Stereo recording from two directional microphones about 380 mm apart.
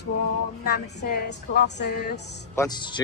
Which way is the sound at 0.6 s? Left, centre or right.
Left.